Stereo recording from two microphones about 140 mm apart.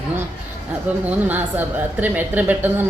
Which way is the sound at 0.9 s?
10° right (ahead or behind).